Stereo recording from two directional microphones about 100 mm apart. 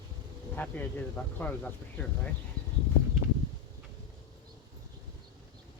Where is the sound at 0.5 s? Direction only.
20° left (ahead or behind).